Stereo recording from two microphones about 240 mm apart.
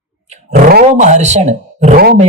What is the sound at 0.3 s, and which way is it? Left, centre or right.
Roar, right.